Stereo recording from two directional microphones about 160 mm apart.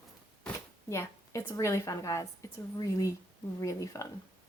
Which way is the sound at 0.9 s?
15° left (ahead or behind).